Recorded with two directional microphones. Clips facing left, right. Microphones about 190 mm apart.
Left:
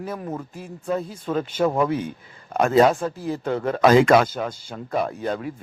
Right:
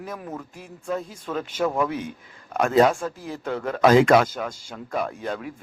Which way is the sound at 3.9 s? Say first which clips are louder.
Left 1 dB; 5° left (ahead or behind).